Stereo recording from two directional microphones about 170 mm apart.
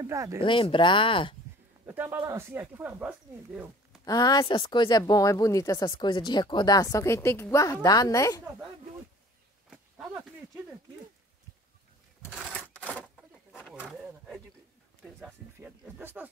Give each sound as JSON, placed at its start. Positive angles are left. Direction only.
{"t": 0.0, "sound": "speech", "side_deg": -20}
{"t": 0.4, "sound": "speech", "side_deg": 30}
{"t": 1.9, "sound": "speech", "side_deg": -10}
{"t": 4.0, "sound": "speech", "side_deg": 25}
{"t": 9.7, "sound": "a sound", "side_deg": -5}
{"t": 12.3, "sound": "a sound", "side_deg": -5}
{"t": 15.1, "sound": "speech", "side_deg": -5}